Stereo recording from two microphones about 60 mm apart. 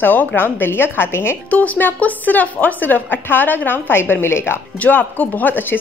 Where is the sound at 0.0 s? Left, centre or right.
Left.